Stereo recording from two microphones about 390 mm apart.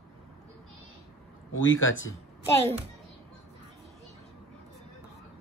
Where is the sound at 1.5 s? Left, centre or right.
Left.